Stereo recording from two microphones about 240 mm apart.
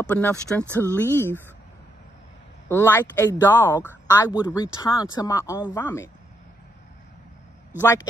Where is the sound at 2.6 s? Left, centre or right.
Centre.